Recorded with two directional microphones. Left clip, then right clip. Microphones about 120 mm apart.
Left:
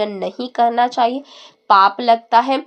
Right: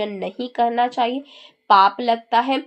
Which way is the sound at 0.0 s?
25° left (ahead or behind).